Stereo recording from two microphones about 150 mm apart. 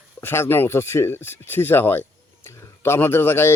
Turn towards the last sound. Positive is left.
turn(degrees=15)  # may be behind; listen again after turning